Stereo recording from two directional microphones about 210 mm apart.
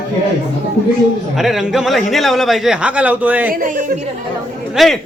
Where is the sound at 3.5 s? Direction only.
40° right (ahead or behind).